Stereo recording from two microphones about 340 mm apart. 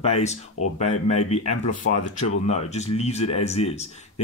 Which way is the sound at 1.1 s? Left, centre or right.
Centre.